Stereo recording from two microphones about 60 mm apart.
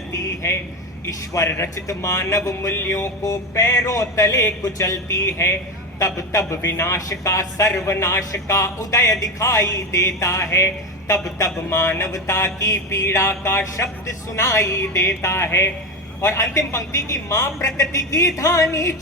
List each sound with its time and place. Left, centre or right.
0.1 s a man's voice: left
1.0 s mantra: left
1.5 s speech: left
1.7 s mantra: left
2.9 s mantra: left
11.1 s mantra: left
11.8 s speech: left
12.1 s mantra: left